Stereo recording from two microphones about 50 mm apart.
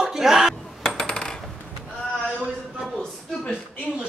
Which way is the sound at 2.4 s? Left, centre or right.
Centre.